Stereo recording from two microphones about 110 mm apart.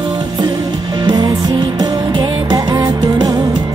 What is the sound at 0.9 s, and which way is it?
Music, 40° right (ahead or behind).